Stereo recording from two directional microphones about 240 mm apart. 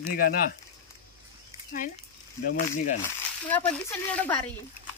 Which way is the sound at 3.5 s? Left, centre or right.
Centre.